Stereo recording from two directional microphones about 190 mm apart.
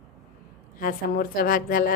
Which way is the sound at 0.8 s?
50° left (ahead or behind).